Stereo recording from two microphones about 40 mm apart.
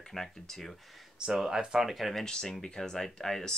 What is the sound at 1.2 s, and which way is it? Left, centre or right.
Speech, centre.